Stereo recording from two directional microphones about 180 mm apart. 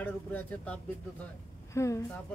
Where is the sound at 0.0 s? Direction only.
10° left (ahead or behind).